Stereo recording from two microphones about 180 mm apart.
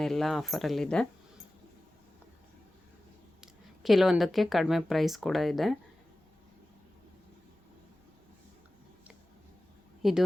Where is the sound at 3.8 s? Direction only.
Centre (ahead or behind).